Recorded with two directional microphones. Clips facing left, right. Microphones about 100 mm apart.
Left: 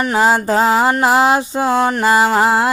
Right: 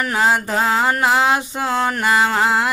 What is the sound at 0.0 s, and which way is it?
Mantra, 25° left (ahead or behind).